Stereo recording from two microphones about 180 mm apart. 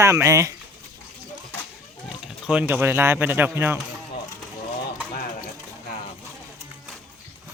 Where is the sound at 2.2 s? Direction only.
5° right (ahead or behind).